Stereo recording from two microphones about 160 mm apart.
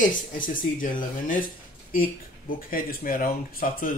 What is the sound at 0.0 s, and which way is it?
Speech, 55° left (ahead or behind).